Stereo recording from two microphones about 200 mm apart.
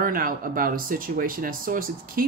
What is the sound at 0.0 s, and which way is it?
Speech, 45° right (ahead or behind).